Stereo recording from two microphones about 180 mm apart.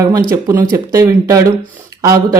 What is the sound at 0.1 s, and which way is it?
A woman's voice, 15° right (ahead or behind).